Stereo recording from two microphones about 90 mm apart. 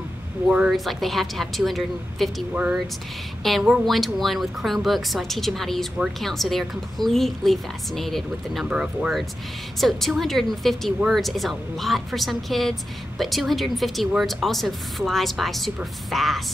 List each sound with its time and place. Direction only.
0.7 s speech: centre (ahead or behind)
2.5 s speech: 15° right (ahead or behind)
3.4 s speech: centre (ahead or behind)
8.6 s speech: 10° right (ahead or behind)
9.8 s speech: centre (ahead or behind)